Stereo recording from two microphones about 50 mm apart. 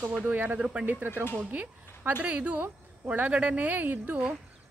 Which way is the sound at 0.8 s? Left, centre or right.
Right.